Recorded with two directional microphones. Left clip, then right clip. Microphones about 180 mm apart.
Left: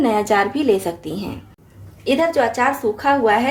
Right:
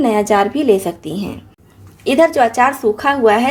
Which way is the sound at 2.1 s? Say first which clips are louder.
Right 5 dB; 45° right (ahead or behind).